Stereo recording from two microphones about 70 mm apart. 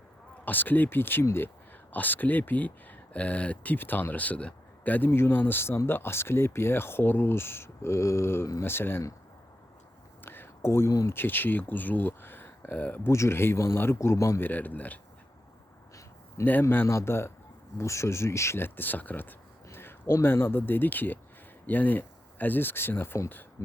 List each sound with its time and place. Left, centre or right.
0.4 s speech: left
10.2 s a sound: left
11.1 s speech: left
13.1 s speech: left
14.4 s speech: left
16.4 s speech: left